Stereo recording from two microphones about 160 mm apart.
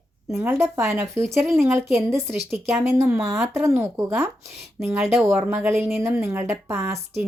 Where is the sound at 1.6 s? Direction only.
15° right (ahead or behind).